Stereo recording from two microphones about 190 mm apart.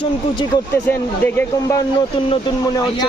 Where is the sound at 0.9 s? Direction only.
10° left (ahead or behind).